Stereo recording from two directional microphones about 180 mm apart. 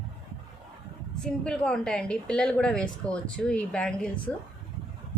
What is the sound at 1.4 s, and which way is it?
A woman's voice, 5° left (ahead or behind).